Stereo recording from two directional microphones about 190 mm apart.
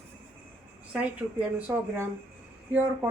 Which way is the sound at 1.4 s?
10° right (ahead or behind).